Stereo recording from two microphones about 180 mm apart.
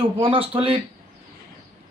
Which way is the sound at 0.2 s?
30° right (ahead or behind).